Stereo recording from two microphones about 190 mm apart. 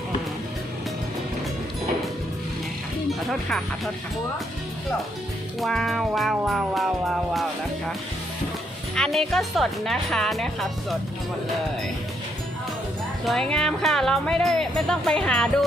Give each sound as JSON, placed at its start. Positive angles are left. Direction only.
{"t": 5.5, "sound": "speech", "side_deg": 0}
{"t": 9.0, "sound": "speech", "side_deg": 0}
{"t": 13.2, "sound": "speech", "side_deg": 5}